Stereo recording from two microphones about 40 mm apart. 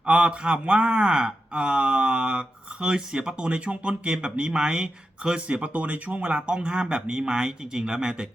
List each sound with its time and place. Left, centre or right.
0.0 s speech: right